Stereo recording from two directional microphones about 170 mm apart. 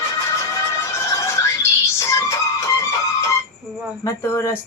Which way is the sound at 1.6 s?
15° left (ahead or behind).